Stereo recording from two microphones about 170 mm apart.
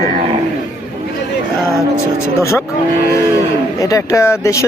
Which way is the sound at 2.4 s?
15° left (ahead or behind).